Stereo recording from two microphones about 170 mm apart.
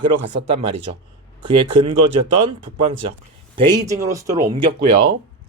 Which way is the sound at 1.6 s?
30° right (ahead or behind).